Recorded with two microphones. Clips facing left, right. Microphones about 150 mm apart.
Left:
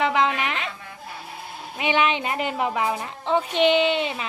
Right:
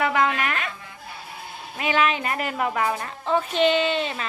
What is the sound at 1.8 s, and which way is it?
A woman's voice, 20° left (ahead or behind).